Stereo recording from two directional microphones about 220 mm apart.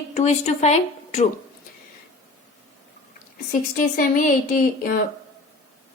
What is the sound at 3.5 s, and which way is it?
A woman's voice, 40° left (ahead or behind).